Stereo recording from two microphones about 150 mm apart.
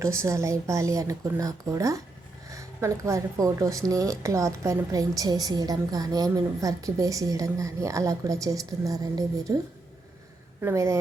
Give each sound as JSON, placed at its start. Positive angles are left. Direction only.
{"t": 0.0, "sound": "speech", "side_deg": -20}
{"t": 10.6, "sound": "a woman's voice", "side_deg": -20}